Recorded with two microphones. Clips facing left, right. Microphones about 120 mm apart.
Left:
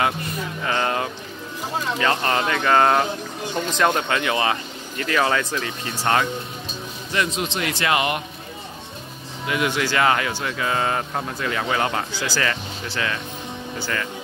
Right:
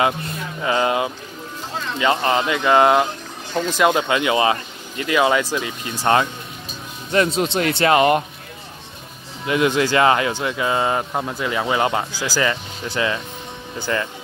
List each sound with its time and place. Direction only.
0.7 s speech: 15° right (ahead or behind)
7.3 s speech: 35° right (ahead or behind)
9.5 s speech: 25° right (ahead or behind)